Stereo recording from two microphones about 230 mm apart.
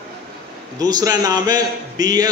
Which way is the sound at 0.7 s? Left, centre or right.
Centre.